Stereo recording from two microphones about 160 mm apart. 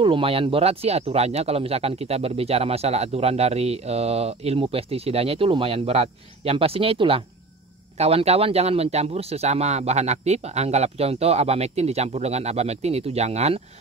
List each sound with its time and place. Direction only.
0.0 s speech: 35° right (ahead or behind)